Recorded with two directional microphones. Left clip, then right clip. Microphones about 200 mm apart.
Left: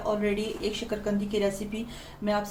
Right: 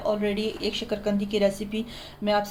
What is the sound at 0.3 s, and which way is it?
A woman's voice, 45° right (ahead or behind).